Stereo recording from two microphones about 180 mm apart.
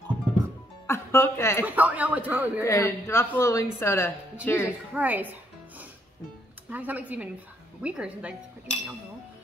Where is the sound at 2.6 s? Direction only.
15° left (ahead or behind).